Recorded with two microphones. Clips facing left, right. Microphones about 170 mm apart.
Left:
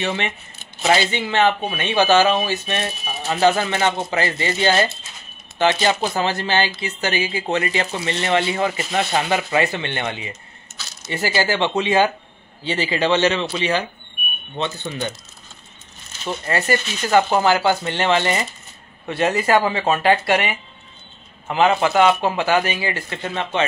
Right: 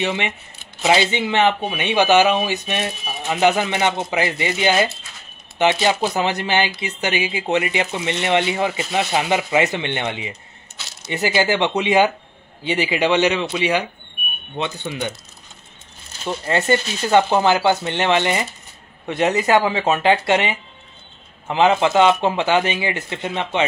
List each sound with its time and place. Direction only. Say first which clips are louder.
0.0 s speech: right 1 dB; 15° right (ahead or behind)
14.9 s speech: right 1 dB; 10° right (ahead or behind)
16.3 s speech: right 2 dB; 20° right (ahead or behind)
17.2 s speech: even; 20° right (ahead or behind)